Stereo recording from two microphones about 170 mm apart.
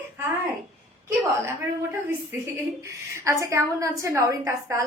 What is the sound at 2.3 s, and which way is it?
A woman's voice, 10° right (ahead or behind).